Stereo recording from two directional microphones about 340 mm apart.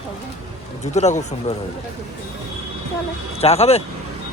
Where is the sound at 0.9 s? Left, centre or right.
Centre.